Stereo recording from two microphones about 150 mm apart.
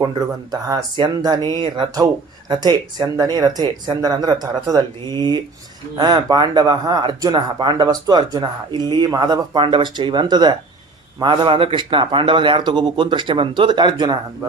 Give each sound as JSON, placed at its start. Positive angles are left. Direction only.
{"t": 0.0, "sound": "speech", "side_deg": -25}